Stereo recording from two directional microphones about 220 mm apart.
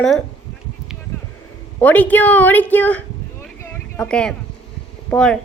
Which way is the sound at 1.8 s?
10° left (ahead or behind).